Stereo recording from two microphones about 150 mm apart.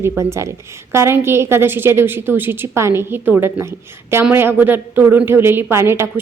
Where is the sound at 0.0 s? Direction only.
15° right (ahead or behind).